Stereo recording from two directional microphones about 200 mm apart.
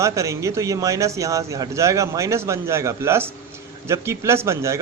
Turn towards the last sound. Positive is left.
turn(degrees=-15)  # may be behind; listen again after turning